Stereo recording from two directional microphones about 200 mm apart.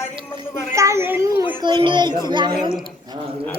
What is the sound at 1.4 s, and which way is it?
A child's voice, 20° right (ahead or behind).